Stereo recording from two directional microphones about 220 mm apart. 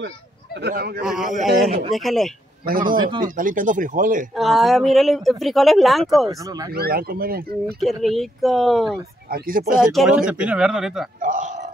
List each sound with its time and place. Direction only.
0.6 s speech: 50° right (ahead or behind)
1.0 s speech: centre (ahead or behind)
3.0 s speech: 20° right (ahead or behind)
3.3 s speech: 40° right (ahead or behind)
4.4 s speech: centre (ahead or behind)
6.2 s speech: 15° right (ahead or behind)
6.7 s speech: 45° right (ahead or behind)
7.6 s speech: centre (ahead or behind)
9.3 s speech: 40° right (ahead or behind)
9.8 s speech: 5° right (ahead or behind)
11.1 s a sound: 35° right (ahead or behind)